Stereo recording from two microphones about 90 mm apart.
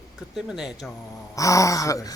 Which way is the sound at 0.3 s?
5° right (ahead or behind).